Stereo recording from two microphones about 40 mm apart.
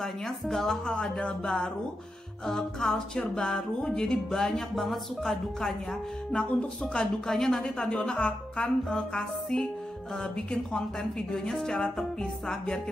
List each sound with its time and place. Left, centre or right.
0.0 s speech: centre
4.8 s music: centre
6.3 s speech: left
7.0 s speech: centre
8.2 s speech: left
9.1 s speech: centre